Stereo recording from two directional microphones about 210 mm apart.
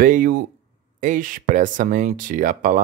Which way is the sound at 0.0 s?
40° right (ahead or behind).